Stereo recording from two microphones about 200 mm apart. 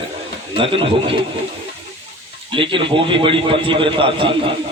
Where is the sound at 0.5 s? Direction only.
25° right (ahead or behind).